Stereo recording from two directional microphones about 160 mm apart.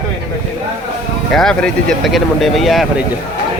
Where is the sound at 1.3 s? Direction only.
5° left (ahead or behind).